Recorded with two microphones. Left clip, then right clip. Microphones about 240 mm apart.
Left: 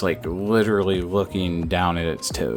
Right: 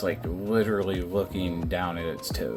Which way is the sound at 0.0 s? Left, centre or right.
Left.